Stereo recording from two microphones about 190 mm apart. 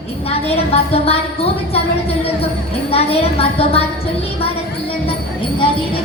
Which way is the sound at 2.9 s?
30° left (ahead or behind).